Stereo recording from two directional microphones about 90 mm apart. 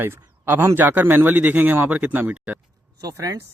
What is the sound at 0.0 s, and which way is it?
A man's voice, 25° right (ahead or behind).